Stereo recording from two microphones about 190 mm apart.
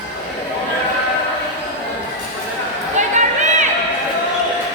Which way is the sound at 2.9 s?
40° right (ahead or behind).